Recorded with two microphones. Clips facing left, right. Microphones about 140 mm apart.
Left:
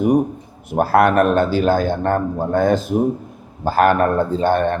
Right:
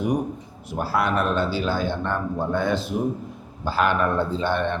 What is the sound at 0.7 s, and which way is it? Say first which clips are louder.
A man's voice: left 9 dB; 55° left (ahead or behind).